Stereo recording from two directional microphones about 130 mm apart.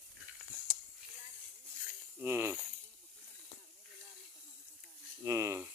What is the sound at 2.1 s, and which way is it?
Speech, 15° right (ahead or behind).